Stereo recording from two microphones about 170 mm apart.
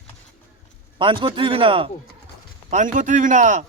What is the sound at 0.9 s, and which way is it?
Speech, 30° right (ahead or behind).